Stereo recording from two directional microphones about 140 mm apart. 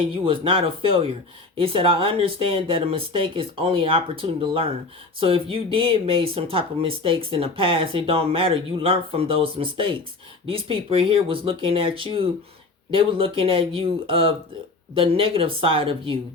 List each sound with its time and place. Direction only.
0.1 s speech: 40° right (ahead or behind)